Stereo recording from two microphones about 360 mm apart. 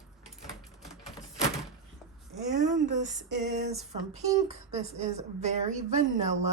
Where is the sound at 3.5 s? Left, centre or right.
Centre.